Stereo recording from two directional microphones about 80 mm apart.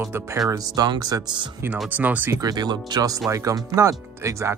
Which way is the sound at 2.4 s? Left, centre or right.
Right.